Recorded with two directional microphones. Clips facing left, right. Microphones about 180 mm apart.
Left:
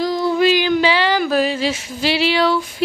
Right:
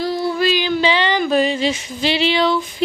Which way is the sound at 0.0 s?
15° left (ahead or behind).